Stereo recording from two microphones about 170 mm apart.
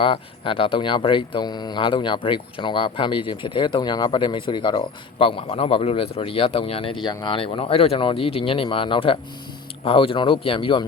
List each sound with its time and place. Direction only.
0.0 s speech: 30° left (ahead or behind)